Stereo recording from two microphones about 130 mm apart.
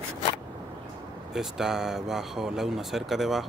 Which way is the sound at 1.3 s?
5° right (ahead or behind).